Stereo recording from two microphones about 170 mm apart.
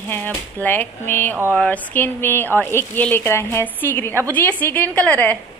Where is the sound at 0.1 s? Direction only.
10° left (ahead or behind).